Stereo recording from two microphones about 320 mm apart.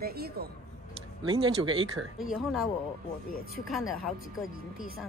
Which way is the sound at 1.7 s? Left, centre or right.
Right.